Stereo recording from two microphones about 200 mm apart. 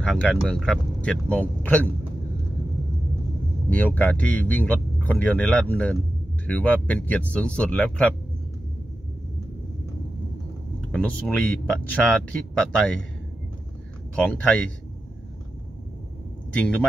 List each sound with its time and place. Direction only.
0.0 s speech: centre (ahead or behind)
3.7 s speech: 5° left (ahead or behind)
10.9 s speech: 5° left (ahead or behind)
14.1 s speech: 5° left (ahead or behind)